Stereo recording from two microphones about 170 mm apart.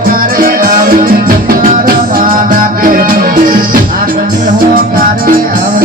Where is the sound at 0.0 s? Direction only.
55° right (ahead or behind).